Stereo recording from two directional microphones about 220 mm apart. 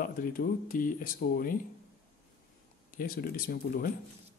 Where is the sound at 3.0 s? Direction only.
40° left (ahead or behind).